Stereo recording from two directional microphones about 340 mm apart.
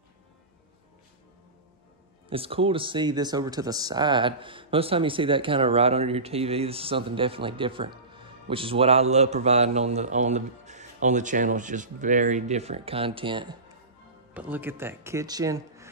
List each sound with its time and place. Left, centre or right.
2.2 s speech: centre